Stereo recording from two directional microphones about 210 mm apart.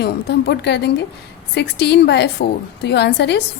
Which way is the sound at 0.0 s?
50° left (ahead or behind).